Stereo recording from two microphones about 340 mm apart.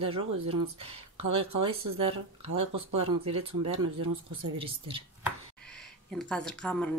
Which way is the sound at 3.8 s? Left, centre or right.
Centre.